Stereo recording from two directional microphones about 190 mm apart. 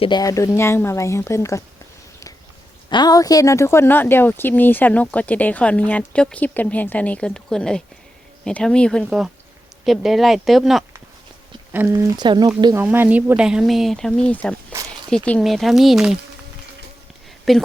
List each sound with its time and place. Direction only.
0.0 s speech: 20° left (ahead or behind)
2.9 s speech: 20° left (ahead or behind); by 10.8 s centre (ahead or behind)
11.7 s speech: 10° right (ahead or behind)
12.8 s speech: 10° right (ahead or behind)
14.7 s a sound: 15° right (ahead or behind)
15.1 s speech: 5° left (ahead or behind)
17.5 s speech: centre (ahead or behind)